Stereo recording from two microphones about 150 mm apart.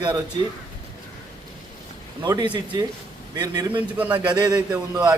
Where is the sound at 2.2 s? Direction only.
30° right (ahead or behind).